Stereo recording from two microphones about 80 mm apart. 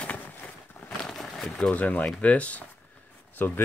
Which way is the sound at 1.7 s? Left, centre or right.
Centre.